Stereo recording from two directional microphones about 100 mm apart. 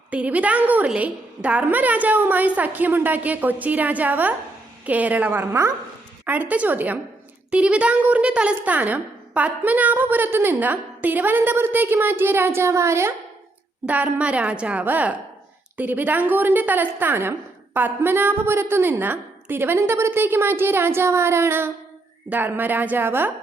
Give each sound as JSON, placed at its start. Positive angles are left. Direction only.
{"t": 0.1, "sound": "a woman's voice", "side_deg": -15}
{"t": 13.8, "sound": "a woman's voice", "side_deg": -15}